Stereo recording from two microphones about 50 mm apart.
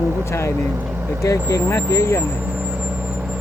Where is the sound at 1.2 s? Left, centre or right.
Left.